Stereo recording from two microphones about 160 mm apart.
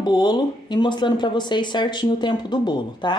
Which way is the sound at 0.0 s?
25° left (ahead or behind).